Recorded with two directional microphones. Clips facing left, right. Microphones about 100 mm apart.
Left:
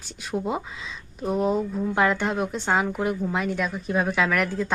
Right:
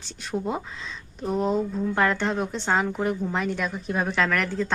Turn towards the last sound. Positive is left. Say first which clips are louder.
# left 1 dB
turn(degrees=5)  # may be behind; listen again after turning